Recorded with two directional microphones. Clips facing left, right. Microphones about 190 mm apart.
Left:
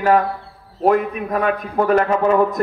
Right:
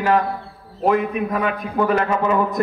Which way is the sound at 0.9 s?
45° left (ahead or behind).